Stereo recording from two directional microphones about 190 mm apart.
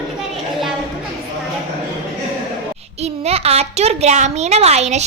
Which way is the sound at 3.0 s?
35° right (ahead or behind).